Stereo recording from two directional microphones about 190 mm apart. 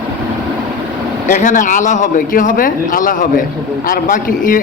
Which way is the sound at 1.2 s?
40° left (ahead or behind).